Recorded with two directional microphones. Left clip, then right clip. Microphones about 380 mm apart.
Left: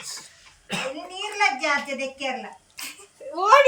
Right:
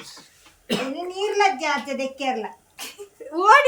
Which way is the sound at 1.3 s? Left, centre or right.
Centre.